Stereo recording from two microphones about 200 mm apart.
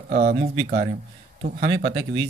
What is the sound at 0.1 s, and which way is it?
Speech, 45° right (ahead or behind).